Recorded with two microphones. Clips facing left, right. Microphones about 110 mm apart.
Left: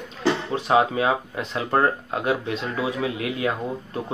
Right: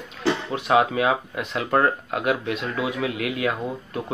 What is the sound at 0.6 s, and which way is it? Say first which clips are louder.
Speech: right 1 dB; 30° left (ahead or behind).